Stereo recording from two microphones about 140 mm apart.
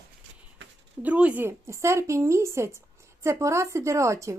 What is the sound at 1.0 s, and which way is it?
Speech, 10° right (ahead or behind).